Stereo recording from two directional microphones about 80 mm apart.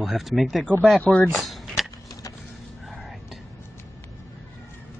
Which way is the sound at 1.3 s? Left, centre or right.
Centre.